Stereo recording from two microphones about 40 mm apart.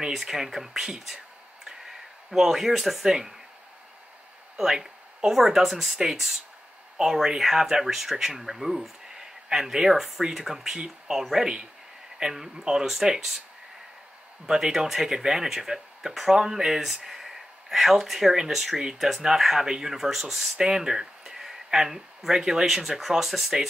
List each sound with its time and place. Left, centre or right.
0.1 s speech: centre
4.6 s speech: centre
14.4 s speech: centre
20.5 s speech: centre